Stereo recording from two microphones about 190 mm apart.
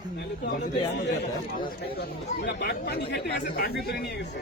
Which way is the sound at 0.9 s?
65° left (ahead or behind).